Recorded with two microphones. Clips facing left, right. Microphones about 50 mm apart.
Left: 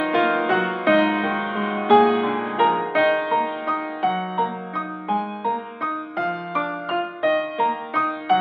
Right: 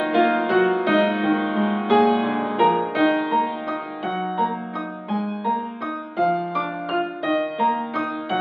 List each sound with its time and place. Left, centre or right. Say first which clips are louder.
0.0 s music: right 1 dB; left
2.0 s music: even; centre